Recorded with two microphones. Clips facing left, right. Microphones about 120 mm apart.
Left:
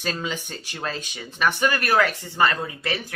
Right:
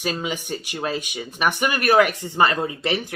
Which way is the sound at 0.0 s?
15° right (ahead or behind).